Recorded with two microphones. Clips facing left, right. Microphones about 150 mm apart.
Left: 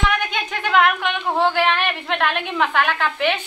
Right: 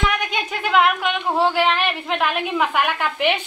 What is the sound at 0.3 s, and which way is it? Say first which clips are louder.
Speech: even; 5° right (ahead or behind).